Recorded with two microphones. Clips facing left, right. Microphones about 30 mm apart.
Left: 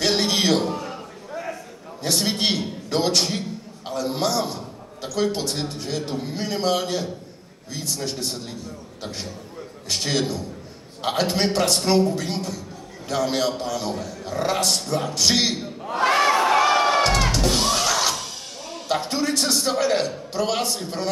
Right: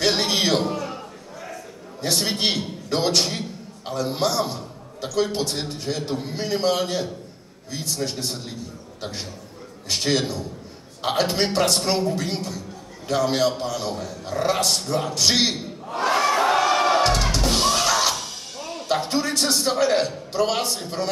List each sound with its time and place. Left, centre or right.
0.0 s a sound: centre
2.0 s a man's voice: centre
15.9 s crowd: left
16.6 s music: centre